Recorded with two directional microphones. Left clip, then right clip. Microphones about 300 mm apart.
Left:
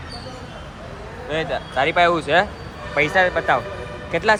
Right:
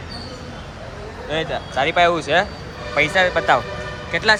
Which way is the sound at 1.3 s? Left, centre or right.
Centre.